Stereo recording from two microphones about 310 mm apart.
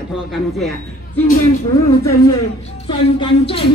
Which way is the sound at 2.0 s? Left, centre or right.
Centre.